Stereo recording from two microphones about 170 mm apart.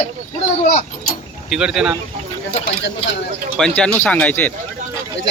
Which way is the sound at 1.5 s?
5° right (ahead or behind).